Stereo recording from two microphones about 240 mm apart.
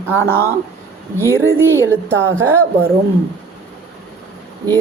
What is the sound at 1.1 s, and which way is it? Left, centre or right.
A woman's voice, centre.